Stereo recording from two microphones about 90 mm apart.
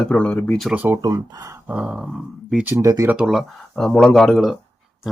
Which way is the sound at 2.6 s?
35° right (ahead or behind).